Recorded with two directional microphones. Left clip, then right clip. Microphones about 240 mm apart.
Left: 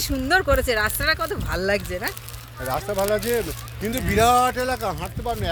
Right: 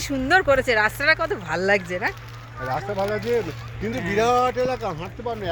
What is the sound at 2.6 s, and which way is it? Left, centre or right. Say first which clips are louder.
Speech: left 2 dB; left.